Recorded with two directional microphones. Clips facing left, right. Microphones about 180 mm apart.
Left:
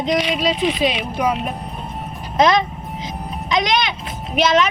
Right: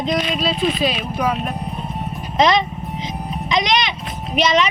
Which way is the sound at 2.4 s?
5° left (ahead or behind).